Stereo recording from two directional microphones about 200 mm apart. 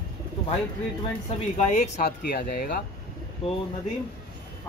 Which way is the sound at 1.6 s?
35° left (ahead or behind).